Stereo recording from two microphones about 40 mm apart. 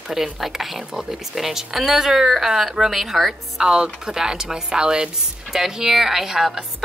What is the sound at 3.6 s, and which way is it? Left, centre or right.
A woman's voice, centre.